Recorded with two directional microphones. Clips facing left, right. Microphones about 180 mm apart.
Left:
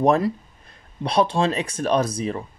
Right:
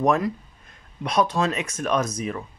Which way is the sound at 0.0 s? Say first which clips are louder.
Left 3 dB; 30° left (ahead or behind).